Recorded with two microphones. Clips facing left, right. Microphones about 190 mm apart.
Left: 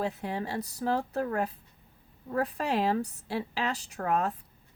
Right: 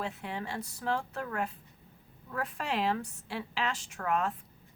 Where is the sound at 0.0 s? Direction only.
40° left (ahead or behind).